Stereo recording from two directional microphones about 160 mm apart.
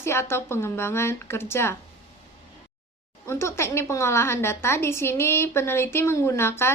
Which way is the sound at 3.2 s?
15° left (ahead or behind).